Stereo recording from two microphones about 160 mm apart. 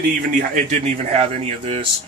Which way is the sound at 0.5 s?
45° right (ahead or behind).